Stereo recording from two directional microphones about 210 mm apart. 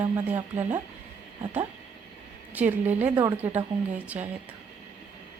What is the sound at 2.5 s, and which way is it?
A woman's voice, 10° right (ahead or behind).